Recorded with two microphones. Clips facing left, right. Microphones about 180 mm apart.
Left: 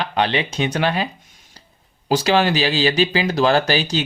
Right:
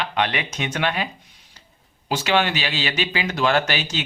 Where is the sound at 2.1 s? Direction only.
35° left (ahead or behind).